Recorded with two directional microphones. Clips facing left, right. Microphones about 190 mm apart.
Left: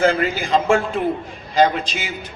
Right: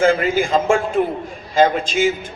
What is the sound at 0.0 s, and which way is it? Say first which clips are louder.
A man's voice: right 3 dB; 50° right (ahead or behind).